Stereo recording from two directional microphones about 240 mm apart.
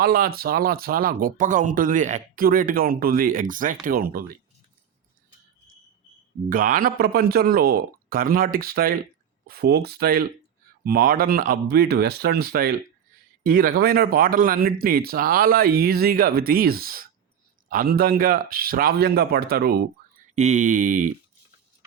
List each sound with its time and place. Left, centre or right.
0.0 s speech: right
6.5 s speech: right